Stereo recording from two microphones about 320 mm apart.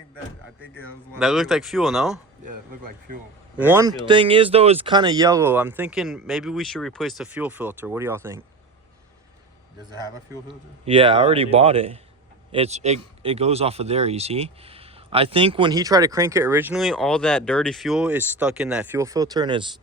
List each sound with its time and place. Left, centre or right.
1.2 s speech: centre
3.6 s speech: centre
9.9 s speech: centre